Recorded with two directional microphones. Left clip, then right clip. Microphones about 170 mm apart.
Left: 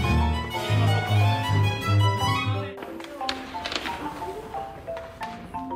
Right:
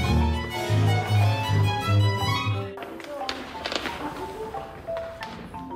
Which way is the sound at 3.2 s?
35° right (ahead or behind).